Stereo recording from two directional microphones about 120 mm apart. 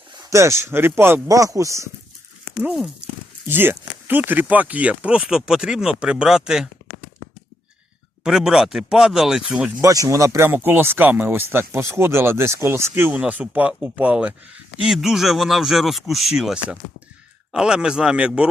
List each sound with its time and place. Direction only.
0.3 s speech: 25° right (ahead or behind)
2.6 s speech: centre (ahead or behind)
3.4 s speech: 20° right (ahead or behind)
8.2 s speech: centre (ahead or behind)
9.8 s speech: 25° right (ahead or behind); by 18.4 s 10° right (ahead or behind)